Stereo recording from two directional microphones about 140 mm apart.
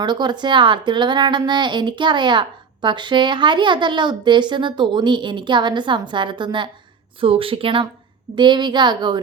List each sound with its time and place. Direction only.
0.0 s speech: 30° right (ahead or behind)